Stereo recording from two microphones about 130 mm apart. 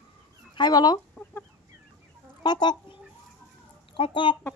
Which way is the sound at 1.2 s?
Centre (ahead or behind).